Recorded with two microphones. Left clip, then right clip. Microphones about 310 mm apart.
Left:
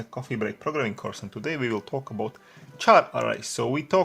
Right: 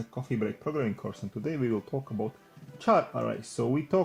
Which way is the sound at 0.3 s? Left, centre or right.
Left.